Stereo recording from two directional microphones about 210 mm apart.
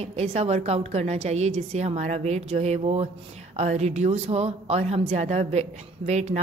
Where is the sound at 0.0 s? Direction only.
30° right (ahead or behind).